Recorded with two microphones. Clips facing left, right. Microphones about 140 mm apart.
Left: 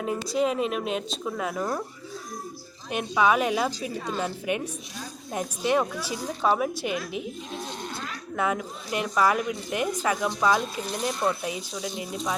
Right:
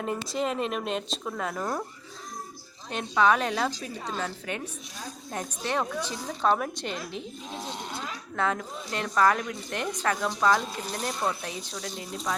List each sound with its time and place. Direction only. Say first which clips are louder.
0.0 s speech: left 4 dB; 5° left (ahead or behind)
2.9 s speech: left 1 dB; 10° left (ahead or behind)
7.7 s a sound: left 1 dB; 15° right (ahead or behind)
8.4 s speech: left 1 dB; 10° left (ahead or behind)